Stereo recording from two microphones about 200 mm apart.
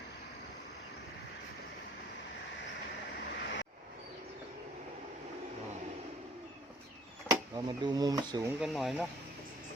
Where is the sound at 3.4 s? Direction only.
65° left (ahead or behind).